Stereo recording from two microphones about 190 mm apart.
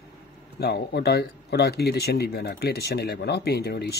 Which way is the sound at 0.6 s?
60° left (ahead or behind).